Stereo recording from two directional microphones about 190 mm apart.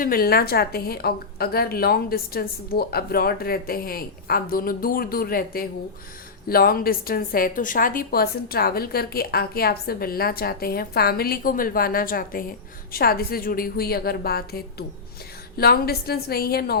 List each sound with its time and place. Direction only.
0.0 s a woman's voice: 50° left (ahead or behind)